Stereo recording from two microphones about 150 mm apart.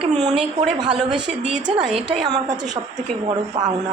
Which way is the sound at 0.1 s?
50° right (ahead or behind).